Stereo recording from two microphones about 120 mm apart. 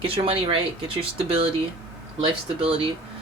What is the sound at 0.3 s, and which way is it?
Speech, 50° right (ahead or behind).